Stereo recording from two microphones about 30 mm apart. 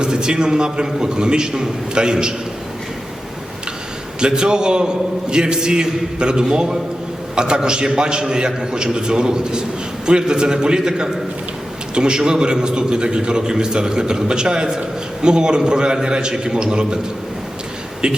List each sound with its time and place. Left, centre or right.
0.0 s a man's voice: right
4.2 s a man's voice: right
18.0 s speech: right